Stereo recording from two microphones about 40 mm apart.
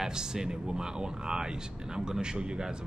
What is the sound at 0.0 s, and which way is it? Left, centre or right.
Speech, centre.